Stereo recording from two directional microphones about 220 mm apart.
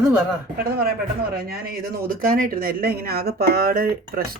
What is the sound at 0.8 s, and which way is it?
A man's voice, 45° right (ahead or behind).